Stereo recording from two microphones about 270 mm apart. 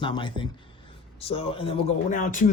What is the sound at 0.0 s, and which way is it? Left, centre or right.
Speech, centre.